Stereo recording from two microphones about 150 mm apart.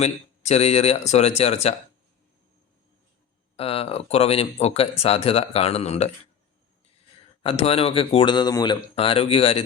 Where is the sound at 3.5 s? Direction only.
40° left (ahead or behind).